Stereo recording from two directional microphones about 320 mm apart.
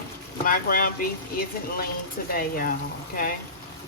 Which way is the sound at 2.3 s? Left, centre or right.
Left.